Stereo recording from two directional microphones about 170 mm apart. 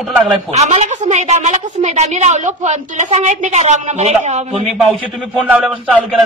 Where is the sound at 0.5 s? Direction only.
40° right (ahead or behind).